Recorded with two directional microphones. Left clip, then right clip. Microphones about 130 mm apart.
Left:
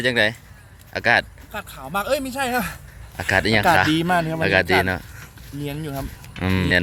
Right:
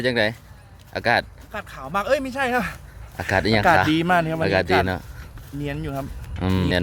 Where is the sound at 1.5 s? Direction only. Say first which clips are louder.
Right 3 dB; centre (ahead or behind).